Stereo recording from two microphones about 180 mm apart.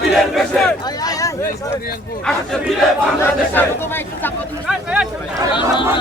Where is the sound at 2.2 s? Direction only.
5° left (ahead or behind).